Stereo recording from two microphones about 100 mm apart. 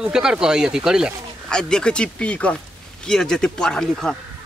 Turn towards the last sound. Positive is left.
turn(degrees=5)  # may be behind; listen again after turning